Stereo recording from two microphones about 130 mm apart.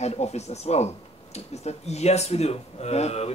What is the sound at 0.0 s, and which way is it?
Speech, 55° left (ahead or behind).